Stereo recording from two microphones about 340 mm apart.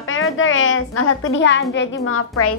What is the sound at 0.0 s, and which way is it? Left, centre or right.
A woman's voice, left.